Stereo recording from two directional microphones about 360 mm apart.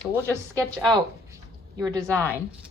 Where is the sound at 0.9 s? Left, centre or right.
Centre.